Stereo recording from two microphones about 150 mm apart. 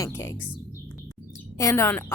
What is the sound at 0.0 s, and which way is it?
Speech, 20° left (ahead or behind).